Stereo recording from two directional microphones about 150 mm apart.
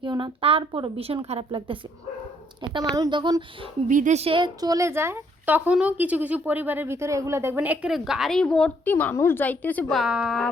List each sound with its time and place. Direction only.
0.0 s a woman's voice: 35° right (ahead or behind)
2.9 s speech: 25° right (ahead or behind)
3.8 s a woman's voice: 55° right (ahead or behind); by 9.8 s 10° left (ahead or behind)
9.9 s speech: 5° right (ahead or behind)